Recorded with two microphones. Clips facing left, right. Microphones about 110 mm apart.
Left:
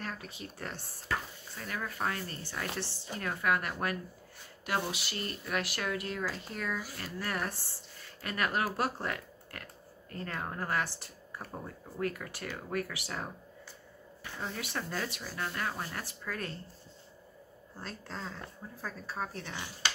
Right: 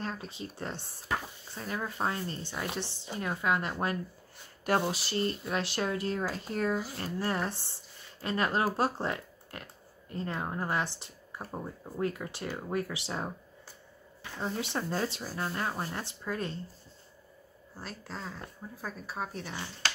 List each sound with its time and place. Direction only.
0.0 s speech: 25° right (ahead or behind)
4.6 s speech: 35° right (ahead or behind)
14.4 s speech: 25° right (ahead or behind)
17.7 s speech: 5° right (ahead or behind)